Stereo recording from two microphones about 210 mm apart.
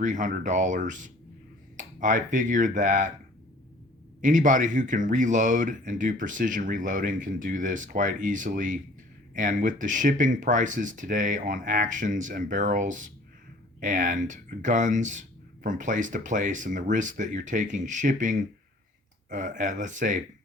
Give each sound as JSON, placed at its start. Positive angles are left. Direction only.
{"t": 0.0, "sound": "speech", "side_deg": -35}
{"t": 4.2, "sound": "speech", "side_deg": -40}